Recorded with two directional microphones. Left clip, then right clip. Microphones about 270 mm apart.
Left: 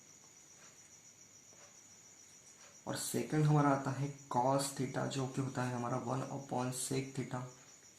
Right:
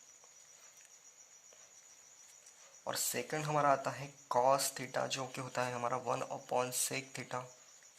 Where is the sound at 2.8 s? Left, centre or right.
Right.